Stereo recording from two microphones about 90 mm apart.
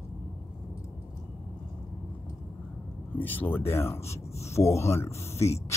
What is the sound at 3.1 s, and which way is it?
Speech, 20° left (ahead or behind).